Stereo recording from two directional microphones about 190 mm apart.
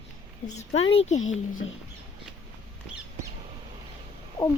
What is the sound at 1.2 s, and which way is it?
Speech, 90° left.